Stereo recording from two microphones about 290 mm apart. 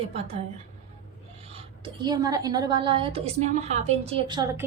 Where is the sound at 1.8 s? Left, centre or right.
Centre.